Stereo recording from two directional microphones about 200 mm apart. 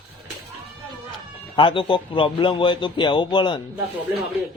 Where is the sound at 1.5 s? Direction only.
25° left (ahead or behind).